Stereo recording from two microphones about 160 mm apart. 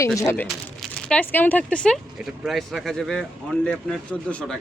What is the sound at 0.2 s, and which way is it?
Speech, 20° left (ahead or behind).